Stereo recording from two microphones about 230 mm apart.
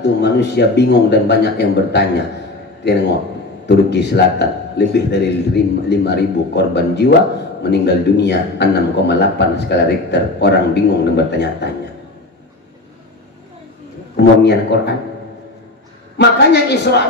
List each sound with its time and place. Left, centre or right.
0.0 s a man's voice: left
14.1 s a man's voice: left
16.2 s a man's voice: left